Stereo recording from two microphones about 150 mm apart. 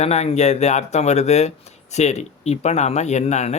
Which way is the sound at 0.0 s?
45° left (ahead or behind).